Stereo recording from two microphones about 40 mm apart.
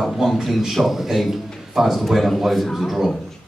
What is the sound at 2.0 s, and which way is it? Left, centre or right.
A man's voice, centre.